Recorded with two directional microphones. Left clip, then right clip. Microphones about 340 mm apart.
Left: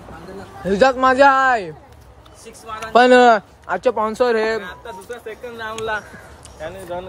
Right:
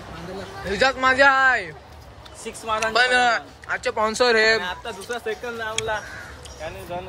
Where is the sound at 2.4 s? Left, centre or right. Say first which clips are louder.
Right 6 dB; centre.